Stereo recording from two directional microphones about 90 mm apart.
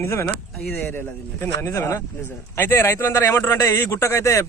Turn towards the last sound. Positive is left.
turn(degrees=35)  # may be behind; listen again after turning